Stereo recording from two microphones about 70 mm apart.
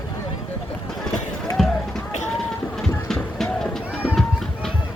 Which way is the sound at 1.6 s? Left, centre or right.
Centre.